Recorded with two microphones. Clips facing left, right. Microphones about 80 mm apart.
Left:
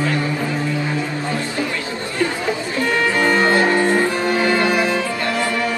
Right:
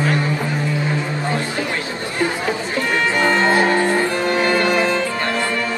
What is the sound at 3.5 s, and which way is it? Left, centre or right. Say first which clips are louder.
Music: even; centre.